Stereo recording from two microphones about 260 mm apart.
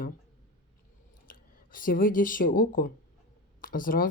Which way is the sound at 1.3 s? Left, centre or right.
Left.